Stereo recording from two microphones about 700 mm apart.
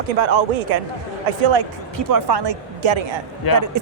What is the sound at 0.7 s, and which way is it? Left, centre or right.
Speech, right.